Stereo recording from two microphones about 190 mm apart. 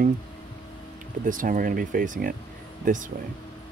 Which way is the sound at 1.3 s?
45° right (ahead or behind).